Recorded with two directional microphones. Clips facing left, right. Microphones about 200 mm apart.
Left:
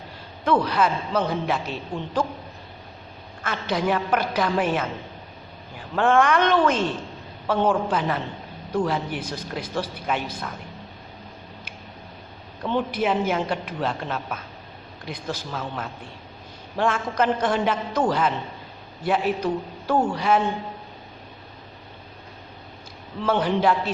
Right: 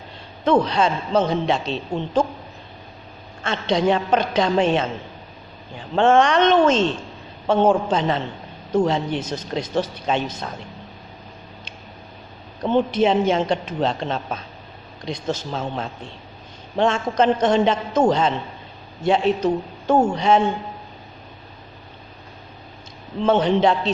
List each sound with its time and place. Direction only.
0.4 s a man's voice: 25° right (ahead or behind)
3.4 s a man's voice: 25° right (ahead or behind)
12.7 s a man's voice: 25° right (ahead or behind)
23.2 s a man's voice: 25° right (ahead or behind)